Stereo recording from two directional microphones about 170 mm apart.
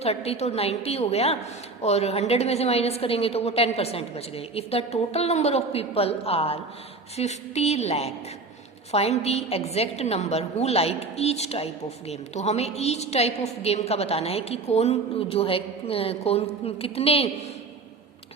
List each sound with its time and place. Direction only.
0.0 s a woman's voice: 35° left (ahead or behind)